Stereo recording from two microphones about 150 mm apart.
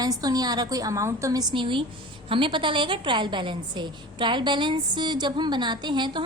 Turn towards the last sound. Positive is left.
turn(degrees=-30)  # may be behind; listen again after turning